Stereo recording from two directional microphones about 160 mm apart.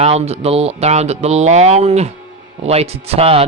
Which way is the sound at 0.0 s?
40° right (ahead or behind).